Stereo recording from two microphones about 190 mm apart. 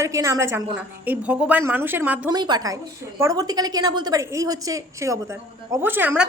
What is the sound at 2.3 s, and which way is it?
A woman's voice, 20° right (ahead or behind).